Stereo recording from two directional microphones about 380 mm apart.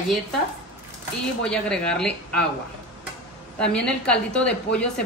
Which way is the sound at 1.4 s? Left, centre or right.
Centre.